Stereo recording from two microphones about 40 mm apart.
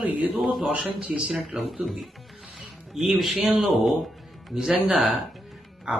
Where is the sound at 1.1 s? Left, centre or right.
Right.